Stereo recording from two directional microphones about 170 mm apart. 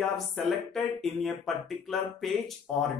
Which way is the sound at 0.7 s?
5° left (ahead or behind).